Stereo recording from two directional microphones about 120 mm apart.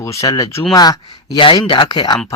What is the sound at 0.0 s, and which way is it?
Speech, 25° left (ahead or behind).